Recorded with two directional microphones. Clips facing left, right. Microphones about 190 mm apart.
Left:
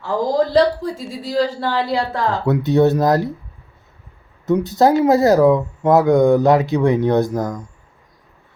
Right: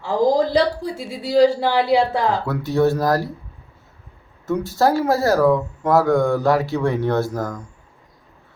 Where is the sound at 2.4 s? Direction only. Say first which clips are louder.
Left 4 dB; 20° left (ahead or behind).